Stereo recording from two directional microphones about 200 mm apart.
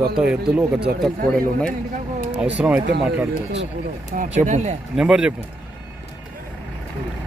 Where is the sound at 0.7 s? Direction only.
55° right (ahead or behind).